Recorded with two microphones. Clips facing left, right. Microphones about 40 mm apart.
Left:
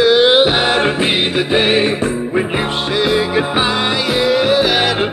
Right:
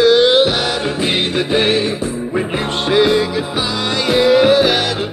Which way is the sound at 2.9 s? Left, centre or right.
Centre.